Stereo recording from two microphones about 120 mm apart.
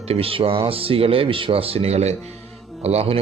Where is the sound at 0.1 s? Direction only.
50° right (ahead or behind).